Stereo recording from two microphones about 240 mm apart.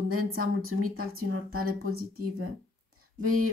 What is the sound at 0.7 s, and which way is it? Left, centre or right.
Speech, right.